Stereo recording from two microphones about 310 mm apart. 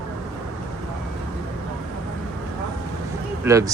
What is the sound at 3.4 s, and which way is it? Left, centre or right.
Speech, centre.